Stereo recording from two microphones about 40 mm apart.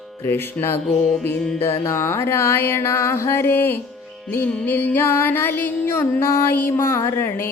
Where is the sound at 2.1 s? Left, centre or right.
Left.